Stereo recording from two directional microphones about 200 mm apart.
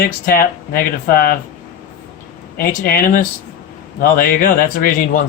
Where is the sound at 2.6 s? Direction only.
45° left (ahead or behind).